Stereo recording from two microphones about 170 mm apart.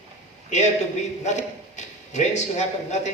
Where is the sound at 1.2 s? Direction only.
45° left (ahead or behind).